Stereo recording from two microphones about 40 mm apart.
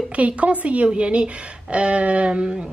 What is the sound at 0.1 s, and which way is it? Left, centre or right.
A woman's voice, right.